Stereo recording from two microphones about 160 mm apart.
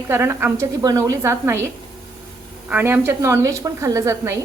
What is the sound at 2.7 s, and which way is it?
A woman's voice, 10° right (ahead or behind).